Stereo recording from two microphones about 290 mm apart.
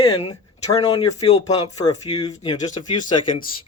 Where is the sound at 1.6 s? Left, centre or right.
Left.